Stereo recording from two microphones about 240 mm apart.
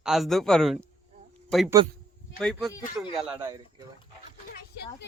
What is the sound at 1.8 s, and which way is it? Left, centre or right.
Speech, centre.